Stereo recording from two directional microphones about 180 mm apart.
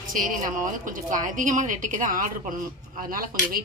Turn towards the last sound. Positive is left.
turn(degrees=-55)  # may be behind; listen again after turning